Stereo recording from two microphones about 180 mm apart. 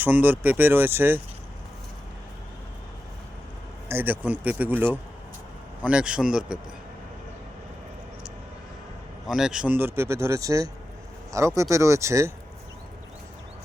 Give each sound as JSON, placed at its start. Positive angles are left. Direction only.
{"t": 0.0, "sound": "speech", "side_deg": -10}
{"t": 3.8, "sound": "speech", "side_deg": -10}
{"t": 9.2, "sound": "speech", "side_deg": -5}